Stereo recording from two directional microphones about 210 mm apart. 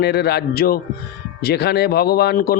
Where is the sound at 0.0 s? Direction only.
50° left (ahead or behind).